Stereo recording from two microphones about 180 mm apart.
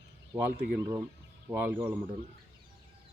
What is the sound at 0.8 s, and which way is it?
Speech, 15° right (ahead or behind).